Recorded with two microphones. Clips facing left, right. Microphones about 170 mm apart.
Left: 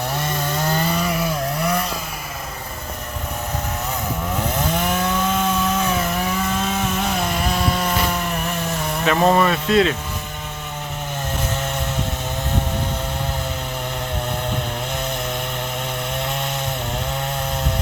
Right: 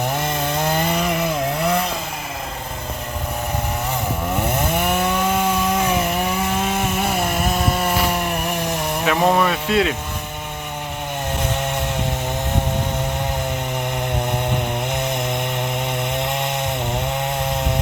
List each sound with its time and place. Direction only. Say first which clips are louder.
0.0 s chainsaw: right 2 dB; 20° right (ahead or behind)
4.4 s chainsaw: right 1 dB; 10° right (ahead or behind)
14.3 s chainsaw: right 3 dB; 20° right (ahead or behind)